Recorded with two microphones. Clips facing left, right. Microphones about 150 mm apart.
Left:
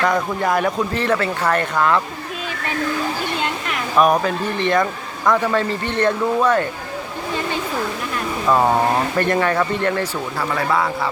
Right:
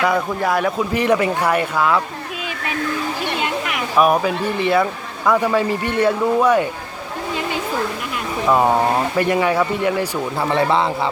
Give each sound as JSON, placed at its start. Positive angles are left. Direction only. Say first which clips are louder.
{"t": 0.0, "sound": "speech", "louder": "even", "side_deg": -5}
{"t": 0.9, "sound": "speech", "louder": "right 3 dB", "side_deg": -15}
{"t": 3.4, "sound": "speech", "louder": "right 2 dB", "side_deg": -5}
{"t": 8.4, "sound": "speech", "louder": "right 1 dB", "side_deg": -10}
{"t": 10.5, "sound": "speech", "louder": "right 3 dB", "side_deg": -25}